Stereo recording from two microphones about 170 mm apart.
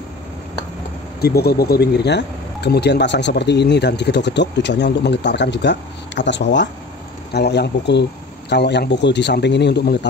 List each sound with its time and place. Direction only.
1.2 s speech: 70° left (ahead or behind); by 9.9 s 85° left